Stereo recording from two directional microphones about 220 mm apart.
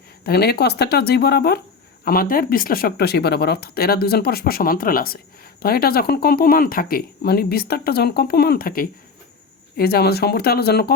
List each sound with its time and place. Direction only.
0.3 s speech: 45° left (ahead or behind)